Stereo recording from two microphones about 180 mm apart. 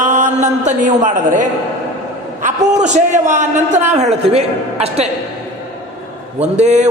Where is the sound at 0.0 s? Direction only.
40° right (ahead or behind).